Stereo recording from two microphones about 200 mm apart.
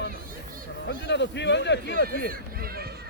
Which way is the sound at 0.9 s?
60° left (ahead or behind).